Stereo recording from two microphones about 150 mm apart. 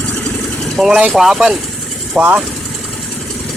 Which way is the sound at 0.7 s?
5° right (ahead or behind).